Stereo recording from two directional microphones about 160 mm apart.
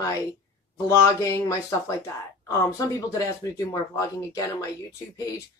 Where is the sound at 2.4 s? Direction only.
20° left (ahead or behind).